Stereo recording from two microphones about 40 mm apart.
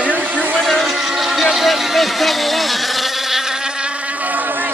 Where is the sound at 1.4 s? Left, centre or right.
Centre.